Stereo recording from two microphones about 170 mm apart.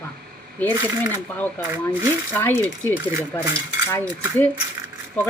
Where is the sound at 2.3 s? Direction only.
10° left (ahead or behind).